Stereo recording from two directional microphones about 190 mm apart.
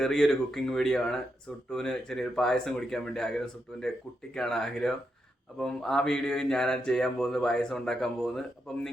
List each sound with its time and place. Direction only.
0.0 s speech: centre (ahead or behind)